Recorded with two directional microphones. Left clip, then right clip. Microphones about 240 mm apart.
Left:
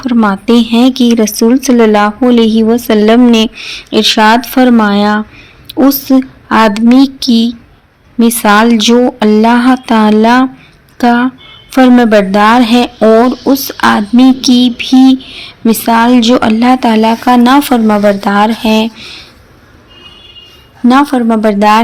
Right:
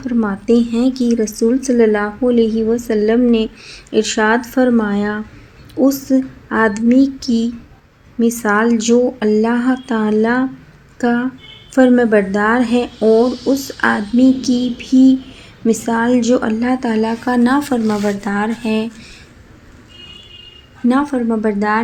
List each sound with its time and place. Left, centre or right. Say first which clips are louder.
0.0 s speech: left 9 dB; left
20.8 s speech: left 9 dB; left